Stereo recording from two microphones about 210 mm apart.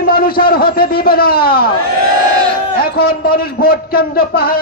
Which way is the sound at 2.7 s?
45° left (ahead or behind).